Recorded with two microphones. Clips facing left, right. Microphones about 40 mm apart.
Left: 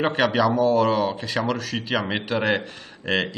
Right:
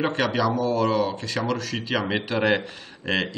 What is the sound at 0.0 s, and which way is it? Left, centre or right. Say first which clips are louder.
Speech: left 3 dB; centre.